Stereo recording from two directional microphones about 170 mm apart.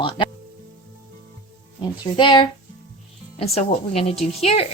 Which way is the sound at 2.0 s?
25° left (ahead or behind).